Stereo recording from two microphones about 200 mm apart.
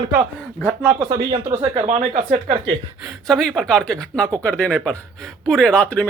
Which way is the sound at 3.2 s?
Centre (ahead or behind).